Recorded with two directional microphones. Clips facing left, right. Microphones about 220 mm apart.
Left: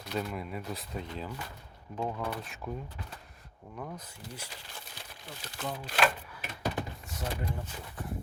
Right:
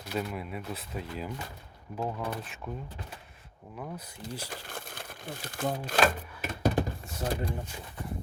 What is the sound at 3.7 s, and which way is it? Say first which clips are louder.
Speech: right 1 dB; 5° right (ahead or behind).